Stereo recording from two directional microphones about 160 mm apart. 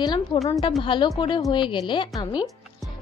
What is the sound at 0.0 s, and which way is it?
A woman's voice, 25° left (ahead or behind).